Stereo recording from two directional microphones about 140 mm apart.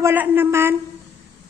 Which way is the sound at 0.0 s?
15° right (ahead or behind).